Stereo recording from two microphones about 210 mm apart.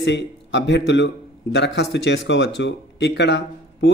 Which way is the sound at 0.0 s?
55° left (ahead or behind).